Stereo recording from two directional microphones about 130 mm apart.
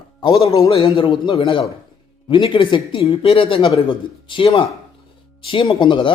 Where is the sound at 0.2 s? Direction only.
35° left (ahead or behind).